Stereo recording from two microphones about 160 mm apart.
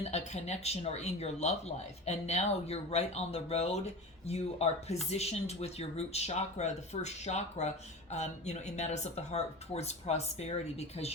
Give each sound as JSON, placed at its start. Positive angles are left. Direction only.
{"t": 0.0, "sound": "speech", "side_deg": 40}